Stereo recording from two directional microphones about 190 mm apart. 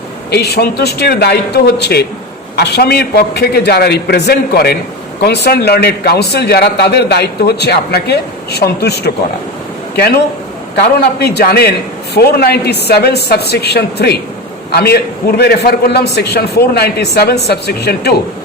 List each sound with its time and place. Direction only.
0.3 s a man's voice: 60° left (ahead or behind)
10.8 s a man's voice: 60° left (ahead or behind)